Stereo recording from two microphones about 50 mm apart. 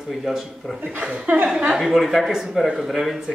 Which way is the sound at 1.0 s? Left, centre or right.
Right.